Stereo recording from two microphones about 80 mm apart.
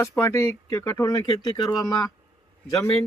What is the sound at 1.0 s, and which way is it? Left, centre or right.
Speech, left.